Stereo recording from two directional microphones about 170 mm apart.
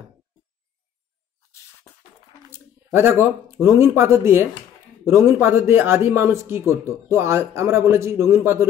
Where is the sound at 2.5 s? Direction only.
15° right (ahead or behind).